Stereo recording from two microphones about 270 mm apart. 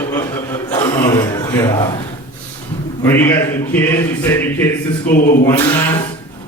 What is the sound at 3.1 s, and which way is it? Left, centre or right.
Speech, centre.